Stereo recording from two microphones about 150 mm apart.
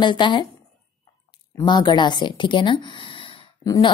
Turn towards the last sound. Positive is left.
turn(degrees=25)  # may be behind; listen again after turning